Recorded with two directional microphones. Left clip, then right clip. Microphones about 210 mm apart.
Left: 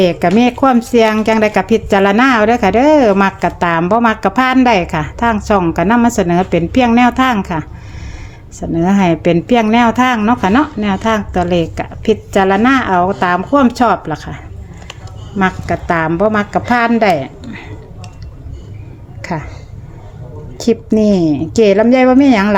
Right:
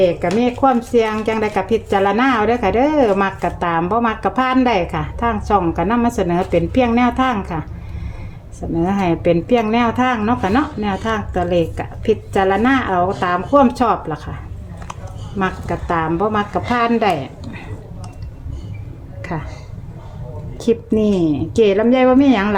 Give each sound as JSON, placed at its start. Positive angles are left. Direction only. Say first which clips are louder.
{"t": 0.0, "sound": "speech", "louder": "left 4 dB", "side_deg": 40}
{"t": 8.7, "sound": "speech", "louder": "left 5 dB", "side_deg": 30}
{"t": 15.4, "sound": "speech", "louder": "left 6 dB", "side_deg": 25}
{"t": 17.4, "sound": "a sound", "louder": "left 4 dB", "side_deg": 20}
{"t": 19.2, "sound": "speech", "louder": "left 5 dB", "side_deg": 20}
{"t": 20.6, "sound": "speech", "louder": "left 4 dB", "side_deg": 20}